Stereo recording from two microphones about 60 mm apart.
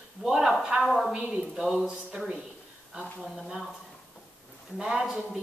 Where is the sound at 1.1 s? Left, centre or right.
Centre.